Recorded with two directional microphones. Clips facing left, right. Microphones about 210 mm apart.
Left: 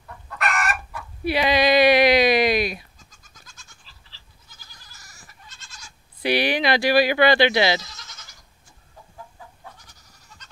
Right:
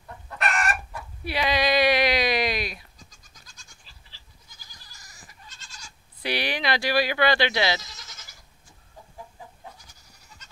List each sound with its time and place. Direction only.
0.3 s chicken: 25° right (ahead or behind)
1.2 s a sound: 10° left (ahead or behind)
4.5 s goat: 15° right (ahead or behind)
5.8 s bleat: 10° left (ahead or behind)